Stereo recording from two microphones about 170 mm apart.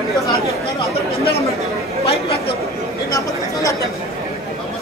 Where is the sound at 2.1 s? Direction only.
35° left (ahead or behind).